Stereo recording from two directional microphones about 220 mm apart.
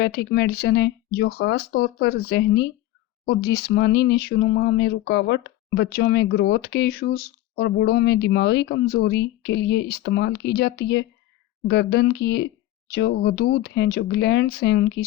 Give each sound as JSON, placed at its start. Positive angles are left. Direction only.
{"t": 0.0, "sound": "speech", "side_deg": 50}